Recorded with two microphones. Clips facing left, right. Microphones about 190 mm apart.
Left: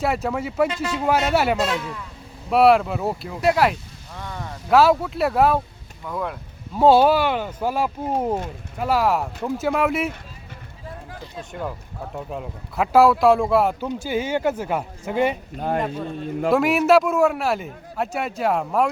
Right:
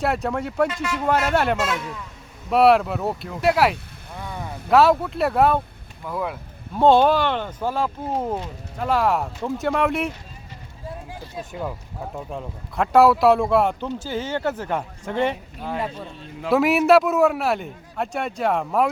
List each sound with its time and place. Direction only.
0.0 s a man's voice: centre (ahead or behind)
0.7 s speech: 25° left (ahead or behind)
1.3 s speech: 5° left (ahead or behind)
1.5 s speech: 30° left (ahead or behind)
2.5 s a man's voice: centre (ahead or behind)
4.2 s a sound: 10° right (ahead or behind)
4.7 s a man's voice: centre (ahead or behind)
12.1 s a man's voice: 5° left (ahead or behind)
16.5 s a man's voice: centre (ahead or behind)